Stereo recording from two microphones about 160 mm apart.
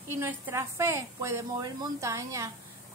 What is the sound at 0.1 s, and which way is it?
A woman's voice, 15° right (ahead or behind).